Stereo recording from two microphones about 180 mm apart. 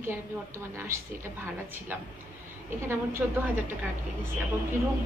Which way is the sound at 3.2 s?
5° right (ahead or behind).